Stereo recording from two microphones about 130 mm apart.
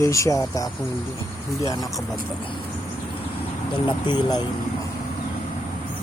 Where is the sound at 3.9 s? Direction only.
35° left (ahead or behind).